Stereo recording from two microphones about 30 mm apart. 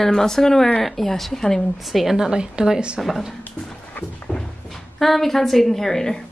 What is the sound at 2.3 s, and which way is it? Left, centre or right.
Speech, right.